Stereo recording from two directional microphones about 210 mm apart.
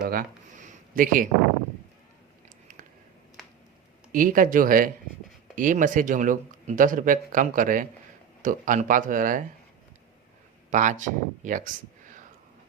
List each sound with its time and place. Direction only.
0.1 s speech: 40° right (ahead or behind)
4.1 s speech: 40° right (ahead or behind)
10.7 s speech: 35° right (ahead or behind)